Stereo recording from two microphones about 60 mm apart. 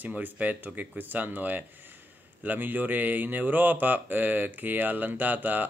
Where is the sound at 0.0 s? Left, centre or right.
Right.